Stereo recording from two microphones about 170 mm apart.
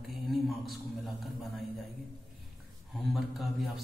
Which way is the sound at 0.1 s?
Centre (ahead or behind).